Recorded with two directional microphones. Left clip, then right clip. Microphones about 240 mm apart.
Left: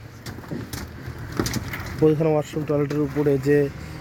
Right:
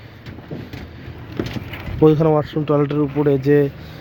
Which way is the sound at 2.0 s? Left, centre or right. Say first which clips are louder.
Right 5 dB; centre.